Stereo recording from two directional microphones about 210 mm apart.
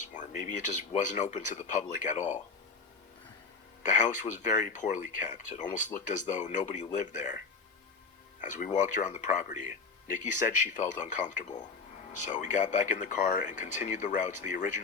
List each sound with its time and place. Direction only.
0.1 s speech: 35° left (ahead or behind)
3.8 s speech: 35° left (ahead or behind)
8.4 s speech: 35° left (ahead or behind)